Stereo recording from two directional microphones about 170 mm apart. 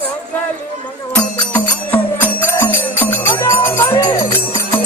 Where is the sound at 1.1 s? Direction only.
10° left (ahead or behind).